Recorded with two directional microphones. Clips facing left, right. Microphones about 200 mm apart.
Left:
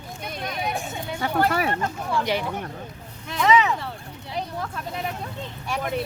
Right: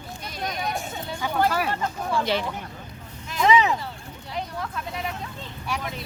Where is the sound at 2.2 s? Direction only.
15° left (ahead or behind).